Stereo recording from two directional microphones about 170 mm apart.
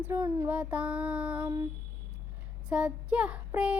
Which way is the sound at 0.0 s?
15° right (ahead or behind).